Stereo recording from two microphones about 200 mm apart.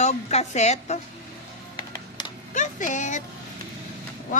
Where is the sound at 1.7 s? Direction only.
20° left (ahead or behind).